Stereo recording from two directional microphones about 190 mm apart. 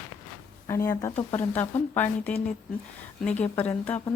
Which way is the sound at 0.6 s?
15° left (ahead or behind).